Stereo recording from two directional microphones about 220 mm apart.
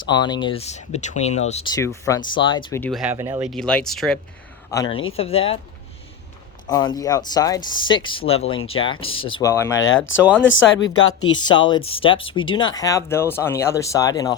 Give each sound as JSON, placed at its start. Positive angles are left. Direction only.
{"t": 0.0, "sound": "speech", "side_deg": 20}
{"t": 1.7, "sound": "speech", "side_deg": 15}
{"t": 2.8, "sound": "speech", "side_deg": 0}
{"t": 3.5, "sound": "speech", "side_deg": 5}
{"t": 4.7, "sound": "speech", "side_deg": 20}
{"t": 6.7, "sound": "speech", "side_deg": 15}
{"t": 10.6, "sound": "speech", "side_deg": 60}
{"t": 11.3, "sound": "speech", "side_deg": 20}